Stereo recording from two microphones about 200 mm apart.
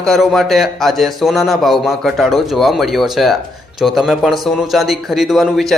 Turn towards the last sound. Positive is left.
turn(degrees=0)  # may be behind; listen again after turning